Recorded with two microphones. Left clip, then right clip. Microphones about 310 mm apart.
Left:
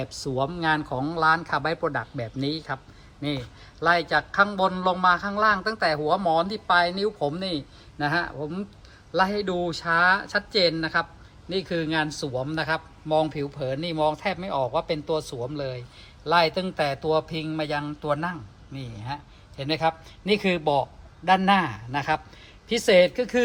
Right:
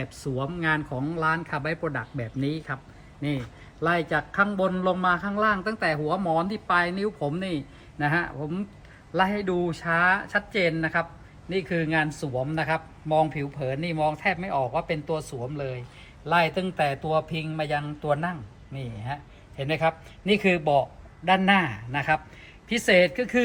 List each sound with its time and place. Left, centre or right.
0.0 s a man's voice: centre
4.4 s a man's voice: centre
20.3 s speech: left
21.2 s a man's voice: centre